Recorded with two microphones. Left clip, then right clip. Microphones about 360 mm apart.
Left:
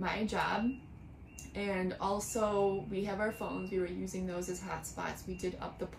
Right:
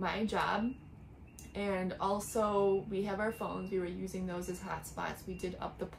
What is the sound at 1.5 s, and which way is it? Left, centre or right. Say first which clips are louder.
A woman's voice: even; centre.